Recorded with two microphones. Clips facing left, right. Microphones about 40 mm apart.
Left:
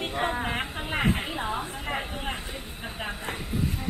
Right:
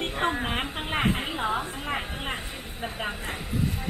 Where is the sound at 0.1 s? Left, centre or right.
Centre.